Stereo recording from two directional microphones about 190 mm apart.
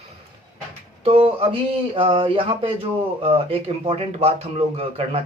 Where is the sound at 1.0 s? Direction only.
30° right (ahead or behind).